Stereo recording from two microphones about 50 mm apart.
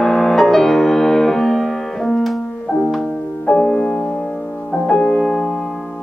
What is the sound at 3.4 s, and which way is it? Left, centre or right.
Music, centre.